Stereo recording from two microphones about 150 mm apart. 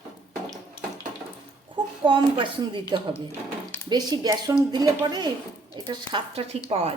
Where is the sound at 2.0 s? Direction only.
35° right (ahead or behind).